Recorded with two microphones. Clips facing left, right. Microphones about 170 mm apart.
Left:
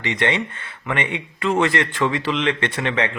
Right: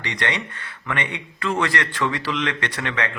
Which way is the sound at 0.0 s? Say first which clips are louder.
Left 5 dB; 20° left (ahead or behind).